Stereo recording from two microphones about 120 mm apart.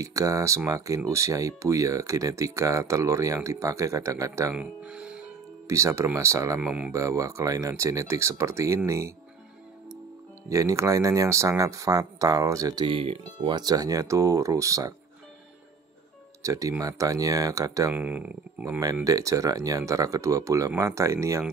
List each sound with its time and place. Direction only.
0.0 s speech: 30° right (ahead or behind)
4.6 s music: 10° right (ahead or behind)
5.7 s speech: 25° right (ahead or behind)
6.6 s speech: 10° right (ahead or behind)
6.9 s speech: 25° right (ahead or behind)
10.5 s speech: 25° right (ahead or behind)
12.8 s speech: 50° right (ahead or behind); by 15.0 s 30° right (ahead or behind)
16.4 s speech: 25° right (ahead or behind)
17.9 s speech: 15° right (ahead or behind)
19.0 s speech: 30° right (ahead or behind)